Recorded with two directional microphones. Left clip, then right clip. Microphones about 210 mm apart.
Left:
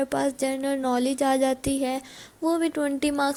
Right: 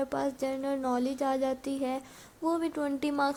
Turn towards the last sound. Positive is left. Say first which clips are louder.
# left 5 dB
turn(degrees=20)  # may be behind; listen again after turning